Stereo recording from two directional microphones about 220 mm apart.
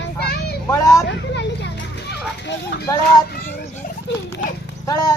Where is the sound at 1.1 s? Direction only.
50° left (ahead or behind).